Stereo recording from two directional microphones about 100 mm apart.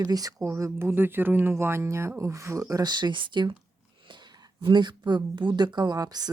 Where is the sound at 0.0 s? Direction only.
35° right (ahead or behind).